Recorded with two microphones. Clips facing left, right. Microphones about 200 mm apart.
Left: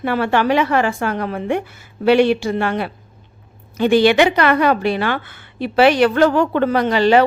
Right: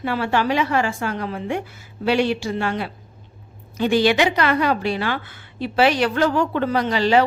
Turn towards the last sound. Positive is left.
turn(degrees=60)  # may be behind; listen again after turning